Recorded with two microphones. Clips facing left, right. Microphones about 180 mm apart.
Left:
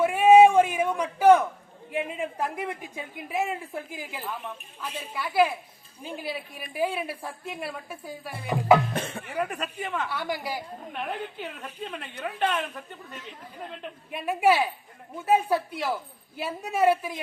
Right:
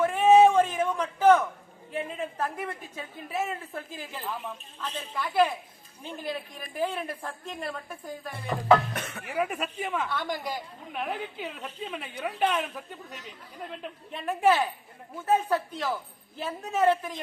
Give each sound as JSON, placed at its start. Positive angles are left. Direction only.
{"t": 0.0, "sound": "a sound", "side_deg": 10}
{"t": 1.9, "sound": "a woman's voice", "side_deg": 15}
{"t": 8.9, "sound": "speech", "side_deg": 30}
{"t": 9.3, "sound": "a woman's voice", "side_deg": -5}
{"t": 10.1, "sound": "a woman's voice", "side_deg": 10}
{"t": 14.1, "sound": "a woman's voice", "side_deg": 10}